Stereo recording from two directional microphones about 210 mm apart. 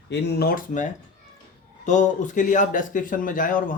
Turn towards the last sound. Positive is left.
turn(degrees=40)  # may be behind; listen again after turning